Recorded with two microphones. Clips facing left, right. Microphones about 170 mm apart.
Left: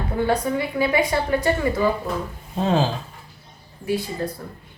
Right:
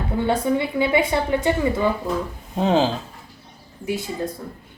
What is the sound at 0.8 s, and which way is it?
A woman's voice, 20° right (ahead or behind).